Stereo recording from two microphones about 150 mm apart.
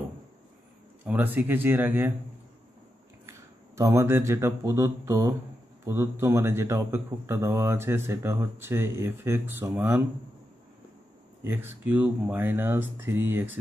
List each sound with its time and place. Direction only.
1.0 s speech: 10° right (ahead or behind)
3.3 s speech: 20° right (ahead or behind)
11.4 s speech: 15° right (ahead or behind)